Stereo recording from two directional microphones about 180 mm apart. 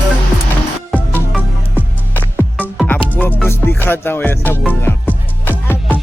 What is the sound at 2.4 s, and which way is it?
Music, 10° left (ahead or behind).